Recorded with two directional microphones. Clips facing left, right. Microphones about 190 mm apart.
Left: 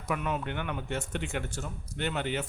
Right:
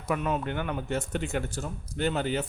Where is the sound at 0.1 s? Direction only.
35° right (ahead or behind).